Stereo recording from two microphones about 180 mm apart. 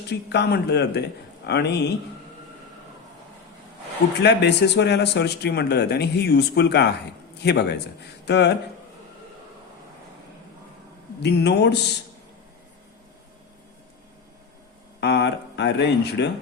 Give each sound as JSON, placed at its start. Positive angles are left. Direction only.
{"t": 0.1, "sound": "a man's voice", "side_deg": 65}
{"t": 4.2, "sound": "a man's voice", "side_deg": 70}
{"t": 11.2, "sound": "a man's voice", "side_deg": 70}
{"t": 15.0, "sound": "a man's voice", "side_deg": 70}